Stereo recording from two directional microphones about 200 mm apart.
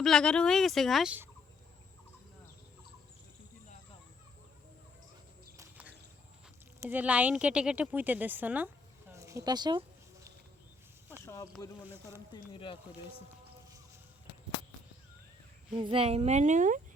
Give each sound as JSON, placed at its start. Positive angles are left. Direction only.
{"t": 0.0, "sound": "speech", "side_deg": 5}
{"t": 5.5, "sound": "a sound", "side_deg": -10}
{"t": 6.7, "sound": "speech", "side_deg": -10}
{"t": 12.3, "sound": "speech", "side_deg": 25}
{"t": 15.7, "sound": "speech", "side_deg": -25}